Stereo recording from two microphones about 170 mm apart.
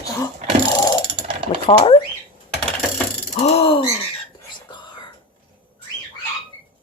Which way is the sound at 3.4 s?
35° left (ahead or behind).